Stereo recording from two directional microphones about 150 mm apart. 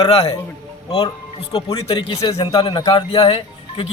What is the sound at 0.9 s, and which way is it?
A man's voice, 25° left (ahead or behind).